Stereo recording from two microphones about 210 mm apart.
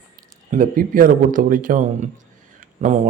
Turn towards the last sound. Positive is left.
turn(degrees=-35)  # may be behind; listen again after turning